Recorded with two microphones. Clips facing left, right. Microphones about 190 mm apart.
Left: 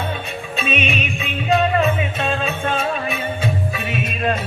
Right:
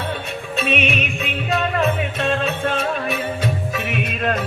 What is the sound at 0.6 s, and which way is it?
Music, 65° right (ahead or behind).